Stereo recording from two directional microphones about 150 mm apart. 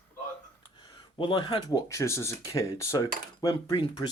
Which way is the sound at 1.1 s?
30° left (ahead or behind).